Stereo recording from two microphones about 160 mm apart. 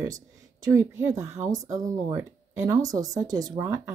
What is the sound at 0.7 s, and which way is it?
Speech, 15° right (ahead or behind).